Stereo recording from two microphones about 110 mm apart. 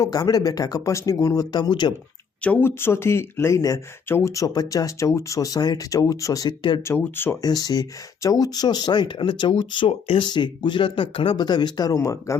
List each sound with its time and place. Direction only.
0.0 s speech: 35° left (ahead or behind)
2.4 s speech: 15° left (ahead or behind); by 6.5 s 30° left (ahead or behind)
6.8 s speech: 20° left (ahead or behind)
7.4 s speech: 35° left (ahead or behind)